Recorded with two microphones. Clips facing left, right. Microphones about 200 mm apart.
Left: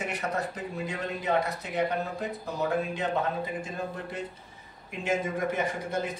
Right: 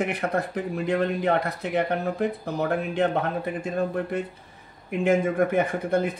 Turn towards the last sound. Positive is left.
turn(degrees=-55)  # may be behind; listen again after turning